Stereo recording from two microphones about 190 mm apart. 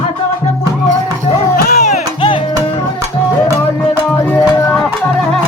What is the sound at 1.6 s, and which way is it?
Music, 55° left (ahead or behind).